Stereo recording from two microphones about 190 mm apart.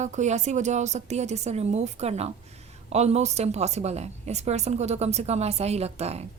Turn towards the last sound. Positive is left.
turn(degrees=-35)  # may be behind; listen again after turning